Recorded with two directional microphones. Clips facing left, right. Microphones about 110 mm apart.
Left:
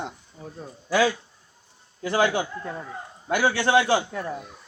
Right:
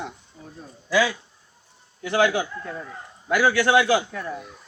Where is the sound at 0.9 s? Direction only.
40° left (ahead or behind).